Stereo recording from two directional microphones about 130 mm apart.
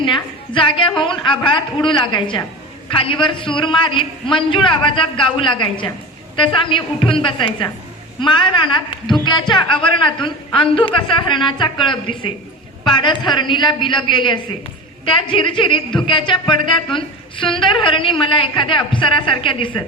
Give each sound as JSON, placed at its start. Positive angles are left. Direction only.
{"t": 0.0, "sound": "a woman's voice", "side_deg": 40}